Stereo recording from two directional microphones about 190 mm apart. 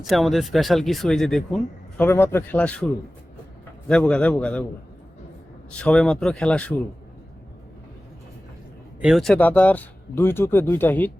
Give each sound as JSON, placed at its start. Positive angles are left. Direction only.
{"t": 0.0, "sound": "speech", "side_deg": 0}
{"t": 5.7, "sound": "speech", "side_deg": 5}
{"t": 9.0, "sound": "speech", "side_deg": 0}